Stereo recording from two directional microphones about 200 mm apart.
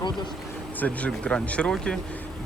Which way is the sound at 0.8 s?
5° left (ahead or behind).